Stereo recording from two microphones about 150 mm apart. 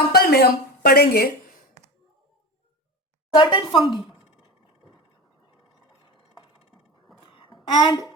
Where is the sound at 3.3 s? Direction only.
30° left (ahead or behind).